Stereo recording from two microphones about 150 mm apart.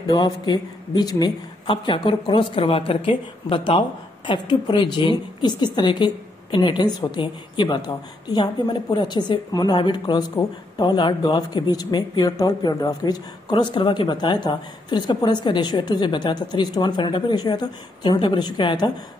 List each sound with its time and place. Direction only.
0.0 s a woman's voice: 30° left (ahead or behind)